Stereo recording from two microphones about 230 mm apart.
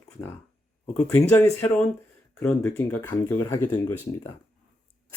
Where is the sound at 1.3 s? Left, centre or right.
Centre.